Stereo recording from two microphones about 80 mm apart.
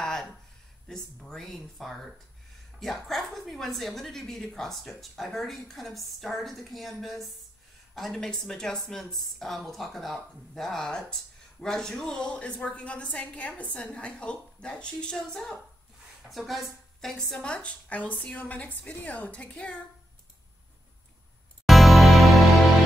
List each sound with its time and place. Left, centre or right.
0.0 s a sound: centre
1.2 s a woman's voice: centre
21.6 s music: centre